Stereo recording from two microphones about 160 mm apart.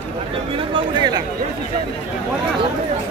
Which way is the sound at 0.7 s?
25° right (ahead or behind).